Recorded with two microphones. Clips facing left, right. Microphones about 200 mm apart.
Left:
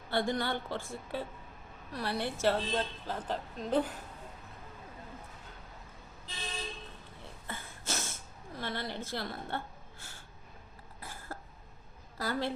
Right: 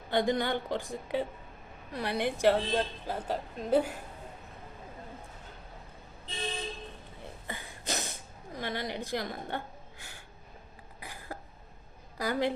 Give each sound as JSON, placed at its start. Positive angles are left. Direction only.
{"t": 0.1, "sound": "a woman's voice", "side_deg": -15}
{"t": 7.4, "sound": "a sound", "side_deg": -15}
{"t": 11.0, "sound": "cough", "side_deg": -15}
{"t": 12.1, "sound": "a woman's voice", "side_deg": -15}